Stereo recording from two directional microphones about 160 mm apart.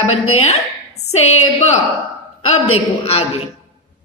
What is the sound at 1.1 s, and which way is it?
Speech, 40° left (ahead or behind).